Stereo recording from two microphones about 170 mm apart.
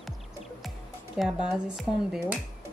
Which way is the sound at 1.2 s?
5° right (ahead or behind).